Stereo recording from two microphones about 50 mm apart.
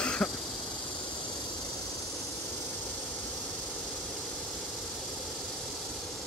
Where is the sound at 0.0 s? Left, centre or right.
Left.